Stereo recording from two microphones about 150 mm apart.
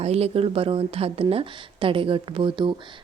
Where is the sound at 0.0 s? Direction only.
40° right (ahead or behind).